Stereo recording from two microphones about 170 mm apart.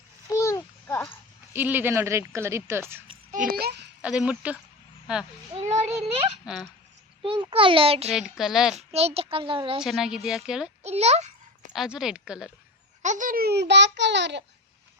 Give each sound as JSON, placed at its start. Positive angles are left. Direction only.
{"t": 0.3, "sound": "babbling", "side_deg": 20}
{"t": 1.5, "sound": "a woman's voice", "side_deg": -10}
{"t": 3.3, "sound": "a child's voice", "side_deg": -60}
{"t": 4.0, "sound": "a woman's voice", "side_deg": -5}
{"t": 5.5, "sound": "a sound", "side_deg": -40}
{"t": 6.4, "sound": "speech", "side_deg": 0}
{"t": 7.2, "sound": "a child's voice", "side_deg": -30}
{"t": 8.1, "sound": "a woman's voice", "side_deg": -5}
{"t": 8.7, "sound": "a child's voice", "side_deg": -40}
{"t": 9.8, "sound": "a woman's voice", "side_deg": -5}
{"t": 10.8, "sound": "a child's voice", "side_deg": -40}
{"t": 11.7, "sound": "a woman's voice", "side_deg": -5}
{"t": 13.0, "sound": "a child's voice", "side_deg": -45}